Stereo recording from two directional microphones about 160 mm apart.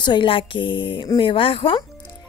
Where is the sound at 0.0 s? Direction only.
30° left (ahead or behind).